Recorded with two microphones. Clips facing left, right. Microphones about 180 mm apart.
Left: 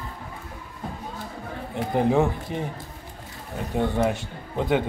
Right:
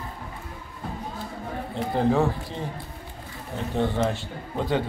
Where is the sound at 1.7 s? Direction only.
15° left (ahead or behind).